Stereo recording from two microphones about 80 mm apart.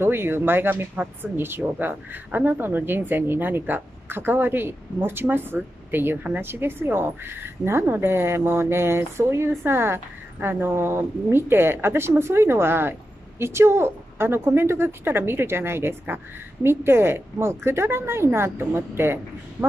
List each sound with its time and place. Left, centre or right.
0.0 s a woman's voice: right